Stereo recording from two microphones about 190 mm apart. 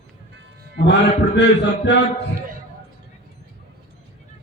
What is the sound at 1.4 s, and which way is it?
Mantra, 65° left (ahead or behind).